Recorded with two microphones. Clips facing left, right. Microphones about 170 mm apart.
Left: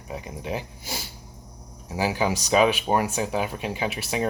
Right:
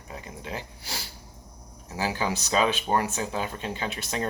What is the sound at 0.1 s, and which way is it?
Speech, 15° left (ahead or behind).